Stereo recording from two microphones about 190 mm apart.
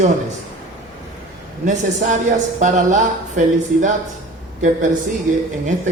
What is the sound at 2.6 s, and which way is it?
Speech, 40° right (ahead or behind).